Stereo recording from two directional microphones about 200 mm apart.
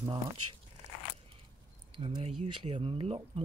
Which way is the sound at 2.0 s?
30° right (ahead or behind).